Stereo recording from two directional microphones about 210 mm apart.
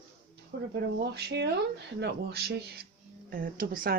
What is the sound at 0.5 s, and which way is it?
Speech, 55° right (ahead or behind).